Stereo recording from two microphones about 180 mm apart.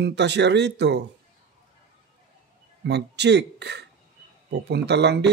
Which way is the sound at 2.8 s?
70° right (ahead or behind).